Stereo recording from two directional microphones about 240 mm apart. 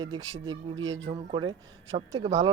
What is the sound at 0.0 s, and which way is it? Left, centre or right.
Speech, centre.